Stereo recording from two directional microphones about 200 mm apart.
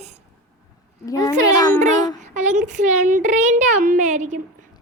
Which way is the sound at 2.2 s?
35° right (ahead or behind).